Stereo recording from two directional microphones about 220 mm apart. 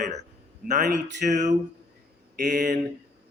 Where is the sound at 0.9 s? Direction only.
50° right (ahead or behind).